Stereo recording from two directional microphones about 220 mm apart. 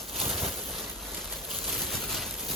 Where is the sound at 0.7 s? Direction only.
Centre (ahead or behind).